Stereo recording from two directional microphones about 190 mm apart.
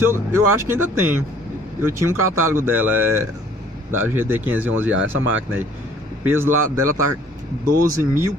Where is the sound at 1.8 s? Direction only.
15° right (ahead or behind).